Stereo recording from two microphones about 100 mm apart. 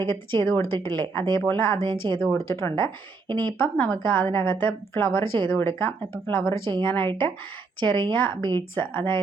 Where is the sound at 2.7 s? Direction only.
55° right (ahead or behind).